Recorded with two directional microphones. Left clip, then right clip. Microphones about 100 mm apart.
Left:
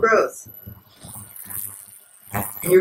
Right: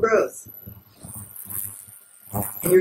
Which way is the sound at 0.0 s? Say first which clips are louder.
Left 2 dB; 15° left (ahead or behind).